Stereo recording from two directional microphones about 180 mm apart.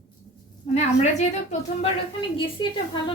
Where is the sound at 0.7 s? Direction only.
40° left (ahead or behind).